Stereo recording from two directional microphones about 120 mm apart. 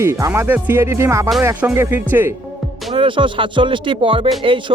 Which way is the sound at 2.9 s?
45° right (ahead or behind).